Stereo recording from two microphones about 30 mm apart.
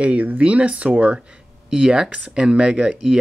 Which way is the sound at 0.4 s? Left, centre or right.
Right.